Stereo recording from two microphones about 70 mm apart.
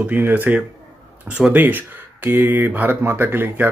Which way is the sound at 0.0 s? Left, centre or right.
Right.